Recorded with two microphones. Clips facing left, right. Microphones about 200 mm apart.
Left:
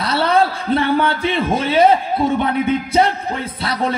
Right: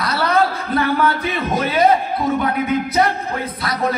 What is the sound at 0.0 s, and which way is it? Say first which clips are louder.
A man's voice: left 2 dB; 30° left (ahead or behind).